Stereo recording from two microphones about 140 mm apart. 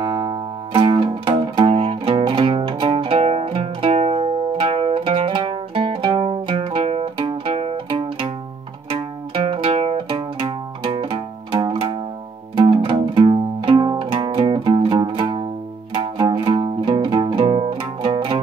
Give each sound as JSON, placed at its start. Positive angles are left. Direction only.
{"t": 0.0, "sound": "music", "side_deg": -30}